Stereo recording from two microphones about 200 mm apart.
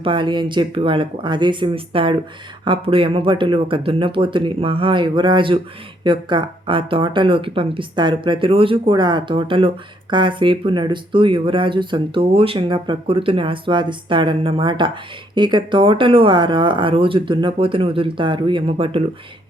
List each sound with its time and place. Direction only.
0.0 s speech: 25° right (ahead or behind)